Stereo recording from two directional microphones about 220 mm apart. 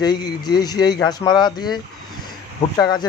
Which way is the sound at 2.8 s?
20° left (ahead or behind).